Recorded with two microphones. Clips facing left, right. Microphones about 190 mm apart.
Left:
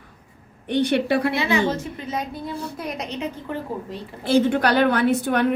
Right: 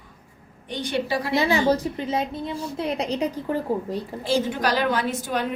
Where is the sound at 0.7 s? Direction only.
65° left (ahead or behind).